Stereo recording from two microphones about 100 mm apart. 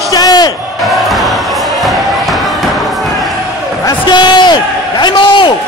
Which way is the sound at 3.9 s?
45° left (ahead or behind).